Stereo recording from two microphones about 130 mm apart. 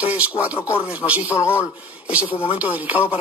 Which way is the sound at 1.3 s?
20° left (ahead or behind).